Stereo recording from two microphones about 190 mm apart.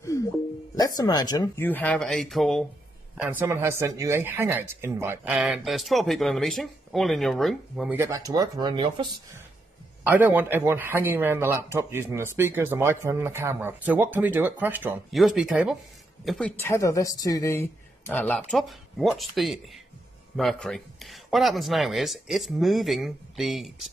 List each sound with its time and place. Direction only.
0.0 s music: 15° left (ahead or behind)
0.7 s speech: 20° left (ahead or behind); by 2.6 s centre (ahead or behind)
3.2 s speech: 10° right (ahead or behind)
8.0 s speech: 15° right (ahead or behind)
10.0 s speech: 10° right (ahead or behind)
16.3 s speech: 5° left (ahead or behind)